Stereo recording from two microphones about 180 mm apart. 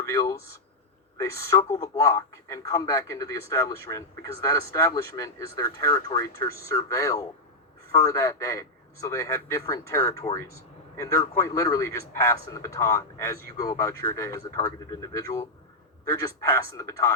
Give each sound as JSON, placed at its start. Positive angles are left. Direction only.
{"t": 0.0, "sound": "speech", "side_deg": 20}